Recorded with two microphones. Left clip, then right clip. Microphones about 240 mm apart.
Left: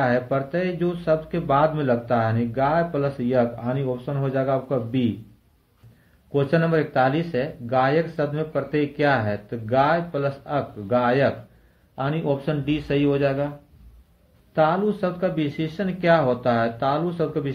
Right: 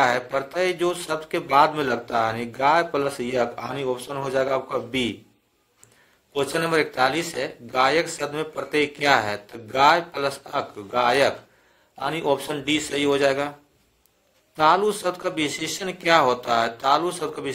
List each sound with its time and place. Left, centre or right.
0.6 s speech: right
6.3 s speech: right
14.6 s speech: right